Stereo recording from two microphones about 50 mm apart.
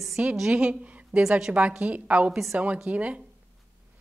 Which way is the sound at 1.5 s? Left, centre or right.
Right.